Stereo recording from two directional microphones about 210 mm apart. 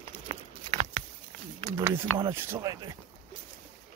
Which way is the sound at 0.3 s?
35° right (ahead or behind).